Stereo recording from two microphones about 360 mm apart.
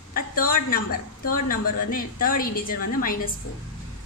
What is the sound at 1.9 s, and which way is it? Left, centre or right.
Speech, left.